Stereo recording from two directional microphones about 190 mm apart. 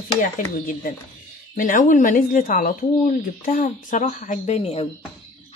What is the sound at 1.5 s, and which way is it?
A woman's voice, 45° left (ahead or behind).